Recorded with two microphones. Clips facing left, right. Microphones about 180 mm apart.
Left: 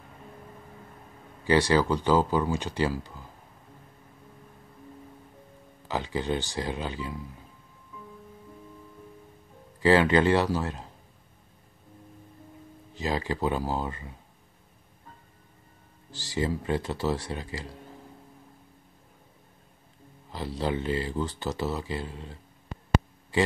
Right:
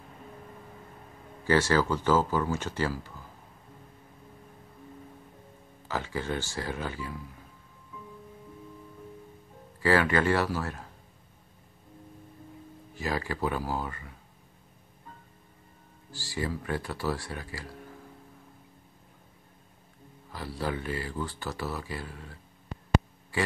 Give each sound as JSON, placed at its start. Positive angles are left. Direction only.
{"t": 1.4, "sound": "speech", "side_deg": 15}
{"t": 5.9, "sound": "speech", "side_deg": 20}
{"t": 9.8, "sound": "speech", "side_deg": 20}
{"t": 12.9, "sound": "speech", "side_deg": 20}
{"t": 16.1, "sound": "speech", "side_deg": 20}
{"t": 20.2, "sound": "speech", "side_deg": 20}